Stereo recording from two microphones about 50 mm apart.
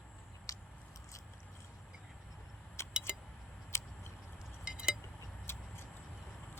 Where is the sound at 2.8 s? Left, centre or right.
Left.